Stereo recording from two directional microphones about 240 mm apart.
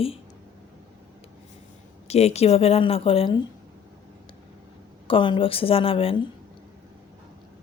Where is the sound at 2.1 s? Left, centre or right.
Left.